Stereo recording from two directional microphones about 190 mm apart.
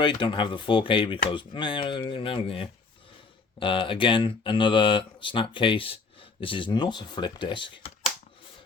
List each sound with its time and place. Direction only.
0.0 s speech: 25° left (ahead or behind)